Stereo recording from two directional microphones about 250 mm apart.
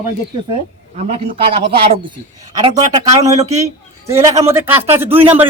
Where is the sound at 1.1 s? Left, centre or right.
Right.